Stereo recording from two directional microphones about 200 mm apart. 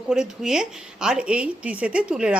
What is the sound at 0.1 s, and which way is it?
A woman's voice, 5° right (ahead or behind).